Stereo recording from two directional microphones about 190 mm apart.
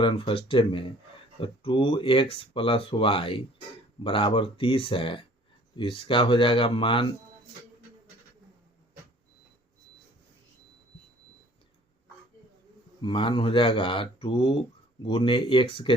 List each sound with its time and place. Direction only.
0.0 s speech: 30° left (ahead or behind)
13.0 s speech: 25° left (ahead or behind)